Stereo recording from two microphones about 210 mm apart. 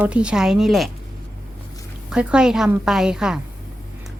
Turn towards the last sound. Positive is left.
turn(degrees=-5)  # may be behind; listen again after turning